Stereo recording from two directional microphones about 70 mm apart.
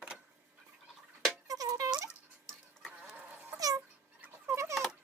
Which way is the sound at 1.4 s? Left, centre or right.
Right.